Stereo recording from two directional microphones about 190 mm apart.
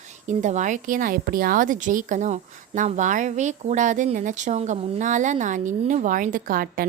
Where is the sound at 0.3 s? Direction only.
40° right (ahead or behind).